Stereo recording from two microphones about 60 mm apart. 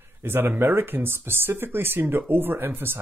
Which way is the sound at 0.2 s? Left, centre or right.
Right.